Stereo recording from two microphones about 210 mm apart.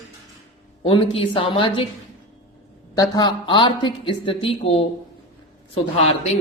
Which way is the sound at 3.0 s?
20° left (ahead or behind).